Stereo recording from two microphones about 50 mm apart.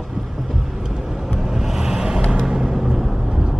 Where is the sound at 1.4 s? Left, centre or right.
Centre.